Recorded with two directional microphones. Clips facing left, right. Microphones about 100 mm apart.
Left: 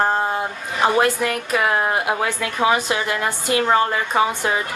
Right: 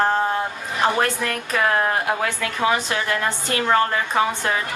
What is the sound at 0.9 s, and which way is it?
A woman's voice, 10° left (ahead or behind).